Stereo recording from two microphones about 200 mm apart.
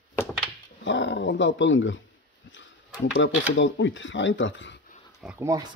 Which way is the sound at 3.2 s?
70° left (ahead or behind).